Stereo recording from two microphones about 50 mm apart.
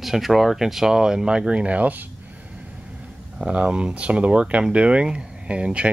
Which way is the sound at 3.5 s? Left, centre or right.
Right.